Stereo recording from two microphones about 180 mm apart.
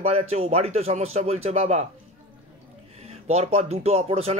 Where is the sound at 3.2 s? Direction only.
35° right (ahead or behind).